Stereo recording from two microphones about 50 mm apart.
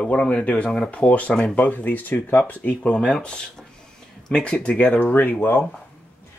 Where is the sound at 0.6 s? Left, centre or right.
Centre.